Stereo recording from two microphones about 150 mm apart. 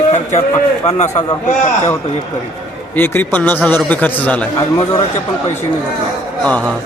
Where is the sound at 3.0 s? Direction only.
15° left (ahead or behind).